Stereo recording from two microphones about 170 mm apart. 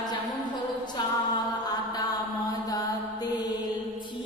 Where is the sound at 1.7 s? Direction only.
20° left (ahead or behind).